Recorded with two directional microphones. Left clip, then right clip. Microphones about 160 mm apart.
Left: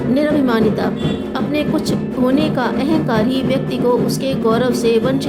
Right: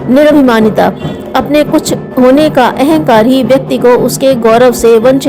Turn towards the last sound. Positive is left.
turn(degrees=-45)  # may be behind; listen again after turning